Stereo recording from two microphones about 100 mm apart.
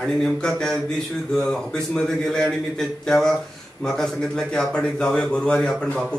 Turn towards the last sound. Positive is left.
turn(degrees=5)  # may be behind; listen again after turning